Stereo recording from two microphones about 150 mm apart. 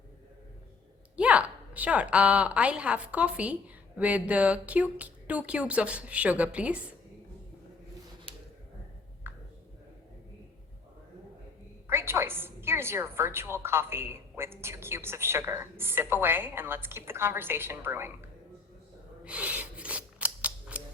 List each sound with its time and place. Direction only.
1.1 s a woman's voice: 10° right (ahead or behind)
9.2 s a sound: 15° right (ahead or behind)
11.9 s a woman's voice: 15° right (ahead or behind)
19.2 s scissors: 10° right (ahead or behind)